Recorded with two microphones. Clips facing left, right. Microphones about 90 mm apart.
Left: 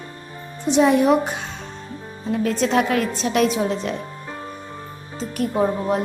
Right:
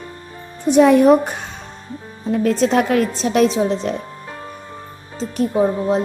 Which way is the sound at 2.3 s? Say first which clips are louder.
Right 3 dB; 40° right (ahead or behind).